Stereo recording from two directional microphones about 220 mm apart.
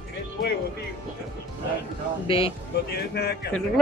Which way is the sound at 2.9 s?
45° left (ahead or behind).